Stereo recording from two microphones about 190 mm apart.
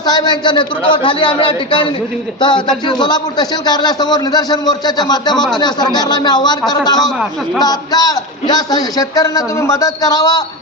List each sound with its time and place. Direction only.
0.0 s a man's voice: 20° left (ahead or behind)
7.0 s a man's voice: centre (ahead or behind)
7.6 s a man's voice: 20° left (ahead or behind)